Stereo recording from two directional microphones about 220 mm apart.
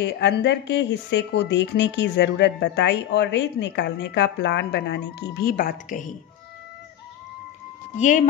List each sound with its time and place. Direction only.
0.0 s speech: 50° left (ahead or behind)
5.6 s a woman's voice: 40° left (ahead or behind)
8.0 s a woman's voice: 35° left (ahead or behind)